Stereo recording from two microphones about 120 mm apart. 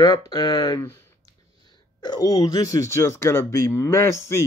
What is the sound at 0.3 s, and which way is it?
Speech, 35° left (ahead or behind).